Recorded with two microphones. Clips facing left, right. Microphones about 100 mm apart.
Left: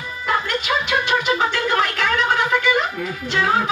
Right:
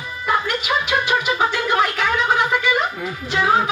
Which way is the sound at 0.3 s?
15° right (ahead or behind).